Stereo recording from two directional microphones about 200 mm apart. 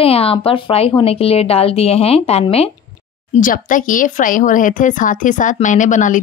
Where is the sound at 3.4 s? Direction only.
40° left (ahead or behind).